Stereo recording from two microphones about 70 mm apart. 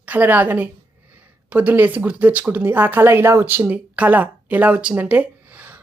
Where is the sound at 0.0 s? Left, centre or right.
Right.